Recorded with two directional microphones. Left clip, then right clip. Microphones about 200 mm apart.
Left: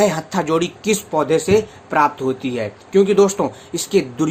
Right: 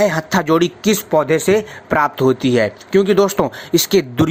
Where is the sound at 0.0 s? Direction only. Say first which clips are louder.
Right 2 dB; 40° right (ahead or behind).